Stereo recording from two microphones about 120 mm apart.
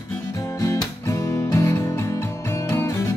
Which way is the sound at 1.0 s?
25° left (ahead or behind).